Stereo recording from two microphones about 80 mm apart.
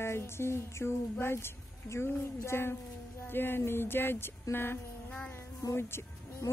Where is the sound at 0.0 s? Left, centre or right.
Left.